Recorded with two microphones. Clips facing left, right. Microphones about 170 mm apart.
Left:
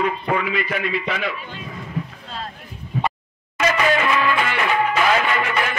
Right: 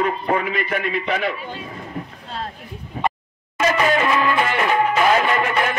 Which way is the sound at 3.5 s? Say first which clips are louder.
Right 1 dB; 40° right (ahead or behind).